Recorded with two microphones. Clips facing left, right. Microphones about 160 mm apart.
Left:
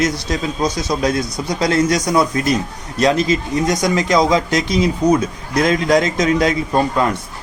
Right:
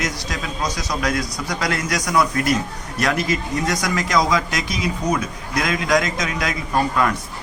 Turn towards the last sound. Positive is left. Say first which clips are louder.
# left 3 dB
turn(degrees=30)  # may be behind; listen again after turning